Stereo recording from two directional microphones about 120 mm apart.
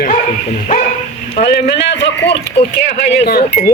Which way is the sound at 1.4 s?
60° left (ahead or behind).